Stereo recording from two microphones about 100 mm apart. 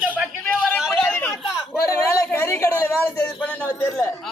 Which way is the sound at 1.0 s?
20° left (ahead or behind).